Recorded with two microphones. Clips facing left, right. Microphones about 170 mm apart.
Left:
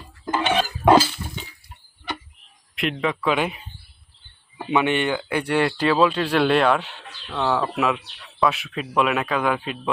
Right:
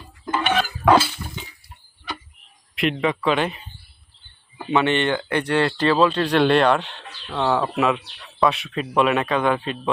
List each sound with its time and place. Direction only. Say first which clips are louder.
0.3 s dishes: even; 20° left (ahead or behind)
2.7 s speech: right 3 dB; centre (ahead or behind)
4.6 s speech: right 1 dB; 10° left (ahead or behind)